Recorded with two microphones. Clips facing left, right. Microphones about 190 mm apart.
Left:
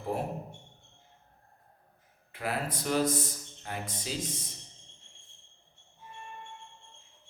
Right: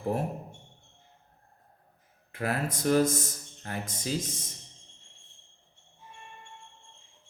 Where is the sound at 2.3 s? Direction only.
45° right (ahead or behind).